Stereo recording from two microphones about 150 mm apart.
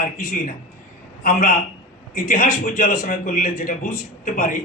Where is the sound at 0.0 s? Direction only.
70° left (ahead or behind).